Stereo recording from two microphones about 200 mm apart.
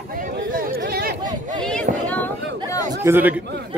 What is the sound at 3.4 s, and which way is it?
Speech, 60° right (ahead or behind).